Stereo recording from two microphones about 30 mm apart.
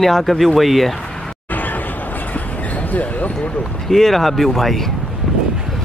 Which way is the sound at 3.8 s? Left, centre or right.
Centre.